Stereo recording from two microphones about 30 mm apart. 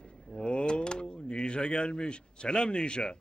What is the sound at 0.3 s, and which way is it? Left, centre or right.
Door, left.